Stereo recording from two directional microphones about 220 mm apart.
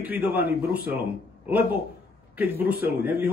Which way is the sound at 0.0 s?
10° right (ahead or behind).